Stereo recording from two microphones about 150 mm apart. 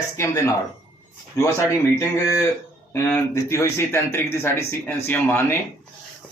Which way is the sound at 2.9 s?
20° left (ahead or behind).